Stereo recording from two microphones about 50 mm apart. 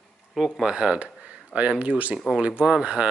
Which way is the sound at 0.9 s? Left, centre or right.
Centre.